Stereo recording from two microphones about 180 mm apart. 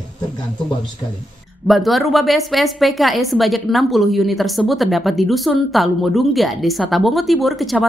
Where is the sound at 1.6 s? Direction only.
Centre (ahead or behind).